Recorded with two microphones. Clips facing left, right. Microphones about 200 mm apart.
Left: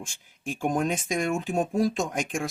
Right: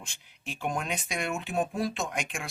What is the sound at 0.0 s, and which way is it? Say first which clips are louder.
Speech: left 7 dB; 45° left (ahead or behind).